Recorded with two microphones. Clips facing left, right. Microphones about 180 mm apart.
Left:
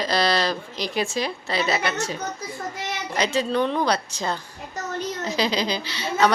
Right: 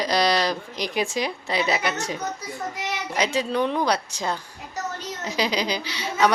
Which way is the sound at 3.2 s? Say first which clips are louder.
Left 1 dB; 10° right (ahead or behind).